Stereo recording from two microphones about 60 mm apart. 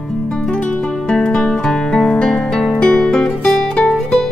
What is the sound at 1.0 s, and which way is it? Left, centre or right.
Music, centre.